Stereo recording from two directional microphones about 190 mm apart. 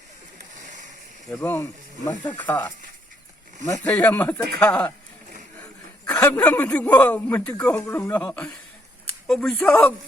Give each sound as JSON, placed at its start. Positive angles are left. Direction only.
{"t": 1.4, "sound": "speech", "side_deg": 15}
{"t": 3.8, "sound": "speech", "side_deg": 10}
{"t": 6.1, "sound": "speech", "side_deg": 10}